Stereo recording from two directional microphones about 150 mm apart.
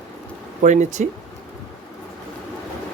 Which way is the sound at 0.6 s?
55° right (ahead or behind).